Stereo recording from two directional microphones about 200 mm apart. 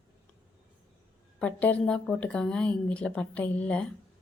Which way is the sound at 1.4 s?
5° left (ahead or behind).